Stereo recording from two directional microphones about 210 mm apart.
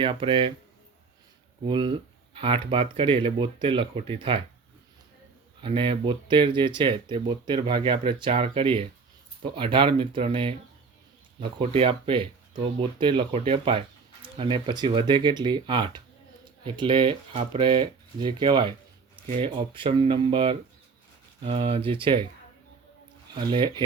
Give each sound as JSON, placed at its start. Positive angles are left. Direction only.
{"t": 0.0, "sound": "speech", "side_deg": -25}
{"t": 1.6, "sound": "speech", "side_deg": -25}
{"t": 5.6, "sound": "speech", "side_deg": -25}
{"t": 23.3, "sound": "speech", "side_deg": -20}